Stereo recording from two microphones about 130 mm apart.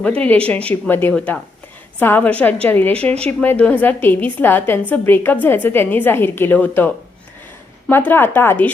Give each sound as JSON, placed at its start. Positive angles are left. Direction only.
{"t": 0.0, "sound": "a woman's voice", "side_deg": 10}